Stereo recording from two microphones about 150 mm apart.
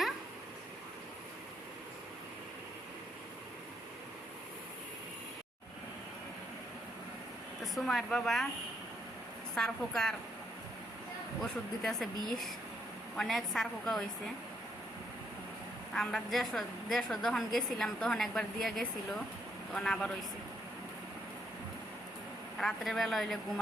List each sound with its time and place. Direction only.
7.6 s a woman's voice: centre (ahead or behind)
9.6 s a woman's voice: 5° left (ahead or behind)
11.4 s a woman's voice: centre (ahead or behind)
15.9 s a woman's voice: 5° left (ahead or behind)
22.5 s a woman's voice: centre (ahead or behind)